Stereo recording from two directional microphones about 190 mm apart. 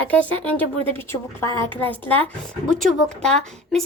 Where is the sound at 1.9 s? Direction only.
10° left (ahead or behind).